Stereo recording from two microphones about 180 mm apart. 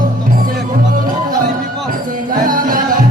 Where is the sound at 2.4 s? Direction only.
50° right (ahead or behind).